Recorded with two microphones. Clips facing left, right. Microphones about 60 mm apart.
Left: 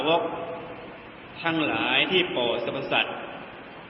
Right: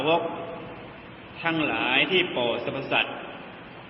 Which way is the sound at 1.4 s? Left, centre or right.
Centre.